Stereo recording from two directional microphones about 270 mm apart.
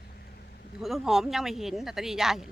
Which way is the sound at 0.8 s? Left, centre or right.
Centre.